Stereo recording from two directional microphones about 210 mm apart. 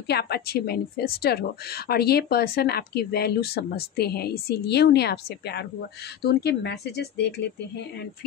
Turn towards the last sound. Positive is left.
turn(degrees=55)  # may be behind; listen again after turning